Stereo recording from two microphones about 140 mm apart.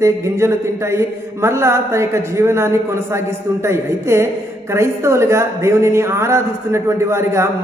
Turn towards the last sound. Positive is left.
turn(degrees=-20)  # may be behind; listen again after turning